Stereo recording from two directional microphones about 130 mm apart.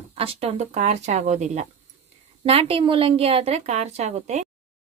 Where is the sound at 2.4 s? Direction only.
45° right (ahead or behind).